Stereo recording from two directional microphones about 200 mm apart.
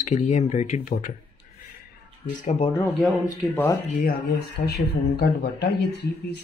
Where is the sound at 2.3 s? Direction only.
35° left (ahead or behind).